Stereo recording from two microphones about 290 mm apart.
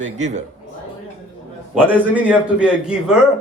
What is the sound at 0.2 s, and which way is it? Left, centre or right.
Speech, right.